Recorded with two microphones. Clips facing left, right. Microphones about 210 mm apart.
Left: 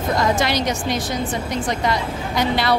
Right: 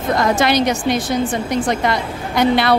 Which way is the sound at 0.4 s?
55° right (ahead or behind).